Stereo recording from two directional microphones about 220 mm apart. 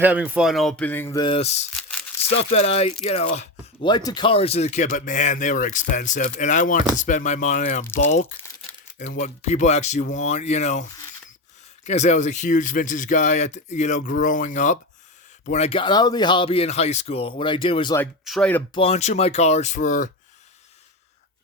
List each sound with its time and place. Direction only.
0.0 s speech: 5° right (ahead or behind); by 1.5 s 25° left (ahead or behind)
1.7 s rattle: 5° left (ahead or behind)
2.4 s speech: 30° left (ahead or behind)
8.0 s speech: 65° left (ahead or behind)
9.2 s speech: 30° left (ahead or behind)
11.9 s speech: 30° left (ahead or behind)
18.3 s speech: 5° left (ahead or behind)
18.7 s speech: 25° left (ahead or behind)